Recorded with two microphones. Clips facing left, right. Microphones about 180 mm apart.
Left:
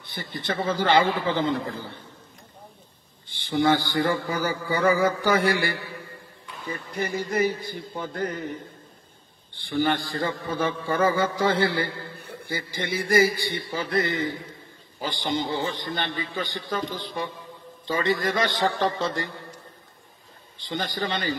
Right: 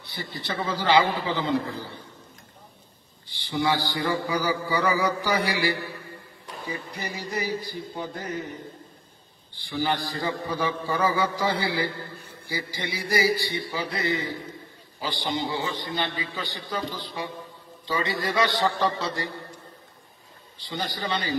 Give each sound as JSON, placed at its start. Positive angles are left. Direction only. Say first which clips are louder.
{"t": 0.1, "sound": "a man's voice", "louder": "left 3 dB", "side_deg": 50}
{"t": 3.3, "sound": "a man's voice", "louder": "left 4 dB", "side_deg": 50}
{"t": 7.0, "sound": "a man's voice", "louder": "left 9 dB", "side_deg": 50}
{"t": 9.8, "sound": "a man's voice", "louder": "left 3 dB", "side_deg": 50}
{"t": 20.6, "sound": "a man's voice", "louder": "left 2 dB", "side_deg": 45}